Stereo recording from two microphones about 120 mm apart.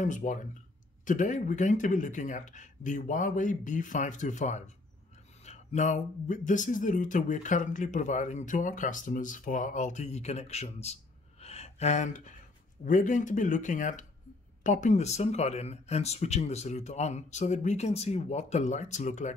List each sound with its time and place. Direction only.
0.0 s speech: 90° left